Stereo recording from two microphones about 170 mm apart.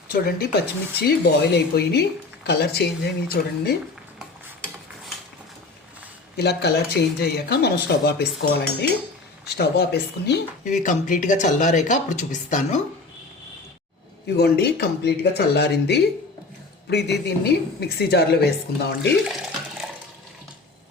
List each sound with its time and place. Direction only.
0.1 s speech: 60° left (ahead or behind)
6.3 s speech: 75° left (ahead or behind)
10.6 s speech: 50° left (ahead or behind)
14.3 s speech: 75° left (ahead or behind)